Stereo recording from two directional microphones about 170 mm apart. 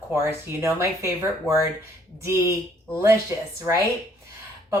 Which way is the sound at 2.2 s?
15° right (ahead or behind).